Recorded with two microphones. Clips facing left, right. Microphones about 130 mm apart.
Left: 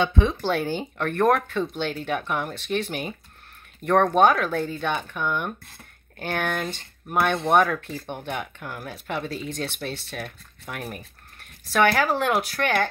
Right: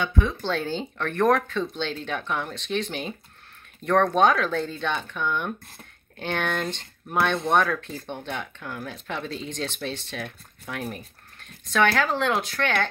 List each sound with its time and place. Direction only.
0.0 s speech: 20° left (ahead or behind)